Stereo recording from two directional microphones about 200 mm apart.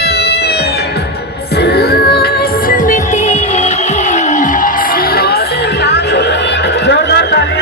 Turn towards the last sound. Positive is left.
turn(degrees=55)  # may be behind; listen again after turning